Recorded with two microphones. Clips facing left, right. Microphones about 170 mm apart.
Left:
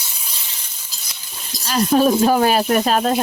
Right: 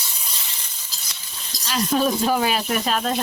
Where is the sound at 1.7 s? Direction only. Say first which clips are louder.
Left 6 dB; 45° left (ahead or behind).